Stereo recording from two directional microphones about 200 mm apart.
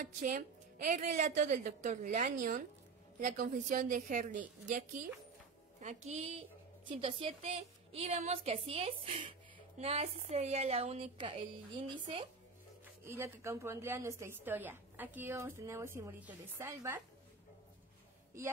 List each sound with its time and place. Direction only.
0.8 s a woman's voice: 40° right (ahead or behind)
13.0 s a woman's voice: 15° right (ahead or behind)